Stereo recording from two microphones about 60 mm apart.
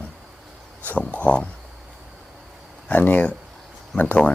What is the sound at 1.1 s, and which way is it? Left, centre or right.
Speech, left.